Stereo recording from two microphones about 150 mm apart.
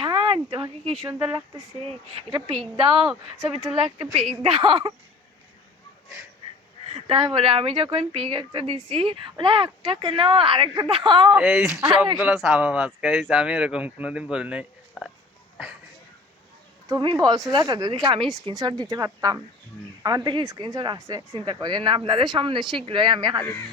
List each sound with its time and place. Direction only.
0.0 s a sound: 35° right (ahead or behind)
1.0 s speech: 30° right (ahead or behind)
2.7 s speech: 35° right (ahead or behind)
6.9 s speech: 35° right (ahead or behind)
11.3 s speech: 5° right (ahead or behind)
16.9 s speech: 30° right (ahead or behind)